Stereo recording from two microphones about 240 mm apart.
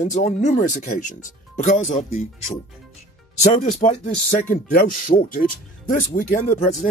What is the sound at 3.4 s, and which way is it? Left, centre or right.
Speech, left.